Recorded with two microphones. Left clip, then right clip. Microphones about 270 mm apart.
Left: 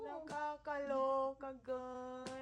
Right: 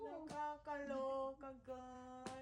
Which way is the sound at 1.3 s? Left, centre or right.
Left.